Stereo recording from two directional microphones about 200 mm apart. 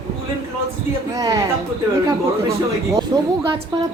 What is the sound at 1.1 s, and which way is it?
Speech, 20° right (ahead or behind).